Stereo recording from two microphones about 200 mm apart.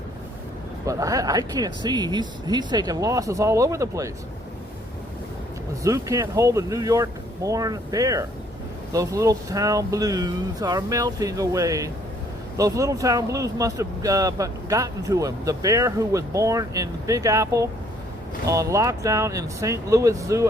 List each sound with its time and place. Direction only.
0.9 s speech: 15° right (ahead or behind)
5.8 s speech: 15° right (ahead or behind)